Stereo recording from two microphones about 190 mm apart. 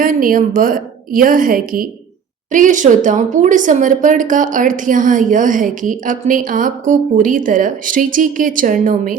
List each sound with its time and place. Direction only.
0.0 s speech: 45° right (ahead or behind)